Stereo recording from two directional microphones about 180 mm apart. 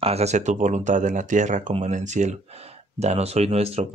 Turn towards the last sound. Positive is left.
turn(degrees=-35)  # may be behind; listen again after turning